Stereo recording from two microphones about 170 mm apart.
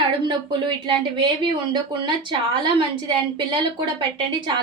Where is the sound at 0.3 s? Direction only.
30° right (ahead or behind).